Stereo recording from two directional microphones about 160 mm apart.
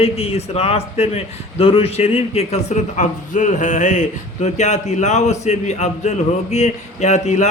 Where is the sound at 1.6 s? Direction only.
35° left (ahead or behind).